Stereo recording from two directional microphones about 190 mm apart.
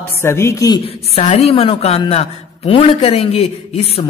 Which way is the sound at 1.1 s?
35° left (ahead or behind).